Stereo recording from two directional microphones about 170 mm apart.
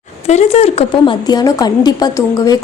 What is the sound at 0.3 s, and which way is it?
A woman's voice, 40° left (ahead or behind).